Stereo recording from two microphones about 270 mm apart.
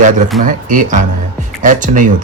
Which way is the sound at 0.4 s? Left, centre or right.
Right.